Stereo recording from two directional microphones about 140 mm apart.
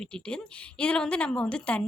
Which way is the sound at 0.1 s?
5° left (ahead or behind).